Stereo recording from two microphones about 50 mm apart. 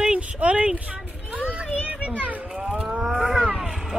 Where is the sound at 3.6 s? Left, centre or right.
Centre.